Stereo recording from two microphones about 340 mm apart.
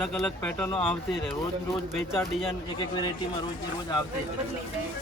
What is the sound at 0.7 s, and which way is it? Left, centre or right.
Speech, centre.